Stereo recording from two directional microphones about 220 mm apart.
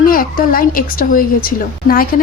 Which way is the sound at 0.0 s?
40° left (ahead or behind).